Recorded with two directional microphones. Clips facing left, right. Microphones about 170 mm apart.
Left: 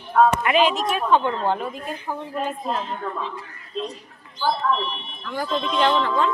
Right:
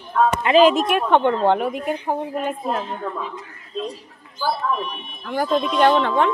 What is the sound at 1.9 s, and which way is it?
Speech, 60° right (ahead or behind).